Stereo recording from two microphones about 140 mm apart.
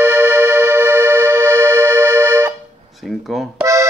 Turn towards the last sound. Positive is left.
turn(degrees=-20)  # may be behind; listen again after turning